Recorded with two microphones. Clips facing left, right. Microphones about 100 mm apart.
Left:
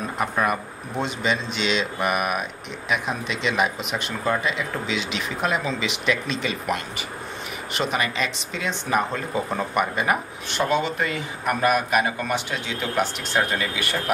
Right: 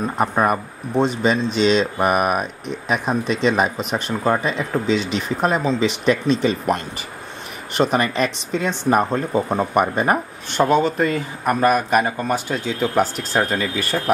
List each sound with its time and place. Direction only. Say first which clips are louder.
0.2 s speech: right 5 dB; 35° right (ahead or behind)